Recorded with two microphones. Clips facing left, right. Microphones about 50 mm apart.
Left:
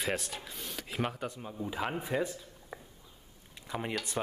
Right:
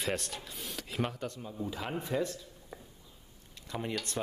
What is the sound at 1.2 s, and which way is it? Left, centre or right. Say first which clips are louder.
Speech: even; centre.